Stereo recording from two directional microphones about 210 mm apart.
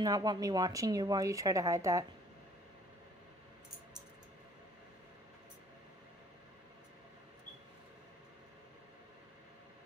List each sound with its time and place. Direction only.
0.0 s speech: 20° right (ahead or behind)